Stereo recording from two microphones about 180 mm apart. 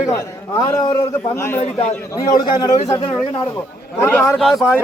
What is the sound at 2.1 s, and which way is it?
Speech, 20° left (ahead or behind).